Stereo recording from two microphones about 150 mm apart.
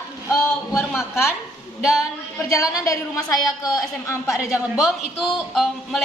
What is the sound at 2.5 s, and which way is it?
Speech, 20° left (ahead or behind).